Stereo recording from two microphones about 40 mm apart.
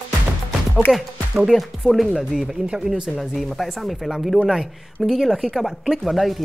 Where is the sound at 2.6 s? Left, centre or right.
Right.